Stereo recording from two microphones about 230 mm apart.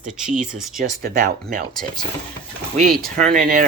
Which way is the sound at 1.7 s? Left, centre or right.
Centre.